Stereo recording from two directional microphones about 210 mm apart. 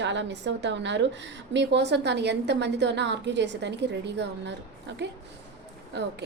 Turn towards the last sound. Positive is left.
turn(degrees=-55)  # may be behind; listen again after turning